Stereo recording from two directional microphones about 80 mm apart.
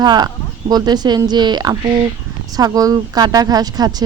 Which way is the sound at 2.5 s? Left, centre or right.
Right.